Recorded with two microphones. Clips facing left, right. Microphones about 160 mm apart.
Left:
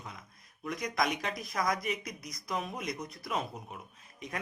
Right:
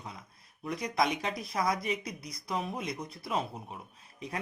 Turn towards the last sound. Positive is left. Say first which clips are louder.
# right 2 dB
turn(degrees=-30)  # may be behind; listen again after turning